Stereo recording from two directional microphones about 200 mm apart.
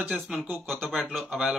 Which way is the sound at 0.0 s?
5° right (ahead or behind).